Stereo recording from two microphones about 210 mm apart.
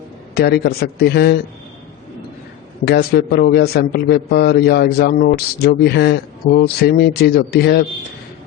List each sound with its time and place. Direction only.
0.3 s a man's voice: 50° left (ahead or behind)
2.8 s a man's voice: 50° left (ahead or behind)